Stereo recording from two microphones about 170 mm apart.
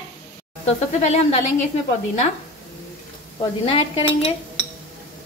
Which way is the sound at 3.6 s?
35° left (ahead or behind).